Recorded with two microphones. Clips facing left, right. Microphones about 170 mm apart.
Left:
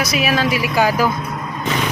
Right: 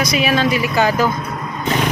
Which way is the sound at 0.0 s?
5° left (ahead or behind).